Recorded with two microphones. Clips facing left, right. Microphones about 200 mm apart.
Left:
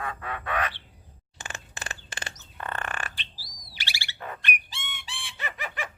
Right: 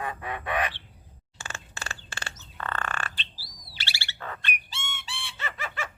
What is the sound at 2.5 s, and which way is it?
Bird, 15° left (ahead or behind).